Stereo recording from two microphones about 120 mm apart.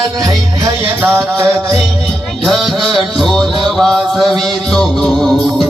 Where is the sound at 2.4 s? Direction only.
Centre (ahead or behind).